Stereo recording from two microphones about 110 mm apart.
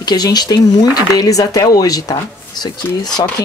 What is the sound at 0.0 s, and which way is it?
Speech, 40° left (ahead or behind).